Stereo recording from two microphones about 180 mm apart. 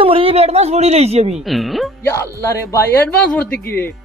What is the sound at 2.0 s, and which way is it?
Speech, 15° left (ahead or behind).